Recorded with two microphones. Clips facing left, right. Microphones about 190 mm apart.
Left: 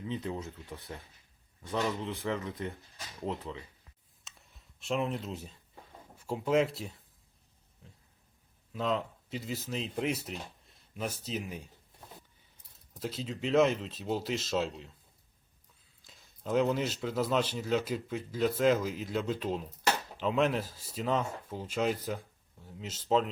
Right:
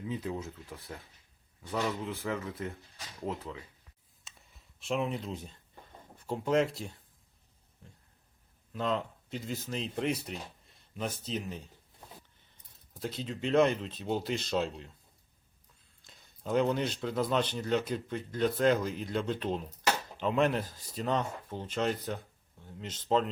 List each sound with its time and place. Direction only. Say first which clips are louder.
0.0 s speech: even; 5° right (ahead or behind)
4.3 s a sound: even; centre (ahead or behind)
6.1 s speech: even; 5° left (ahead or behind)
7.8 s a sound: right 1 dB; centre (ahead or behind)
8.7 s speech: even; centre (ahead or behind)
16.0 s speech: even; centre (ahead or behind)